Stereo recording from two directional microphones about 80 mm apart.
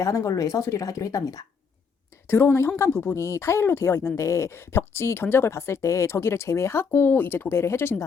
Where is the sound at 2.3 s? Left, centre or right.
Left.